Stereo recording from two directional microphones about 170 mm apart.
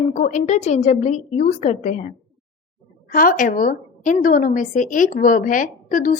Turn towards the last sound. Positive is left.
turn(degrees=50)  # may be behind; listen again after turning